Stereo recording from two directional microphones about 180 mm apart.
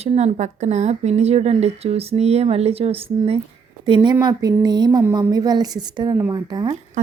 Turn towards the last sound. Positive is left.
turn(degrees=-20)  # may be behind; listen again after turning